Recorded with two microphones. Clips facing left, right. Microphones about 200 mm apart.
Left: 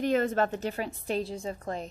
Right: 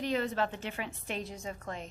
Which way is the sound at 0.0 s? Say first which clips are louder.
Left 6 dB; 50° left (ahead or behind).